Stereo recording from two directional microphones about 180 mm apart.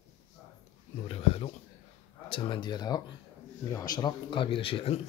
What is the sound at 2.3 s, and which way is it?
A man's voice, 25° left (ahead or behind).